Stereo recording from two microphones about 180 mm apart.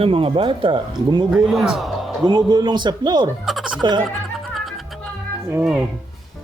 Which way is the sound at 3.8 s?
25° right (ahead or behind).